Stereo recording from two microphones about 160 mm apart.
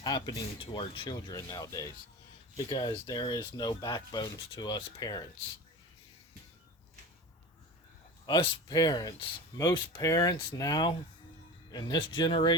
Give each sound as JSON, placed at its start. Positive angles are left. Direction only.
{"t": 0.0, "sound": "speech", "side_deg": 25}
{"t": 8.3, "sound": "speech", "side_deg": 25}